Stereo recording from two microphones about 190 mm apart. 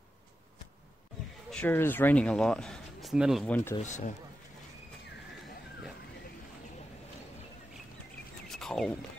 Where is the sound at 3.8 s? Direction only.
40° left (ahead or behind).